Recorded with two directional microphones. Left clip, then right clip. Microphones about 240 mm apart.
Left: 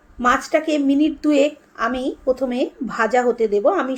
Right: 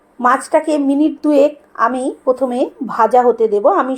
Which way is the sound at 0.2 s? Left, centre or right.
Centre.